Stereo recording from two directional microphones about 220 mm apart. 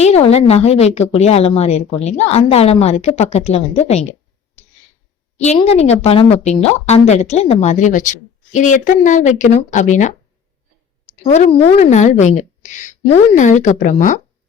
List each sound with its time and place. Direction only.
0.0 s a woman's voice: 30° left (ahead or behind)
5.4 s a woman's voice: 30° left (ahead or behind)
11.2 s a woman's voice: 30° left (ahead or behind)